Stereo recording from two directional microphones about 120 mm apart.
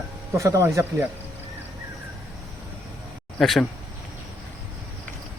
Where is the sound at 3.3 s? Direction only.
5° left (ahead or behind).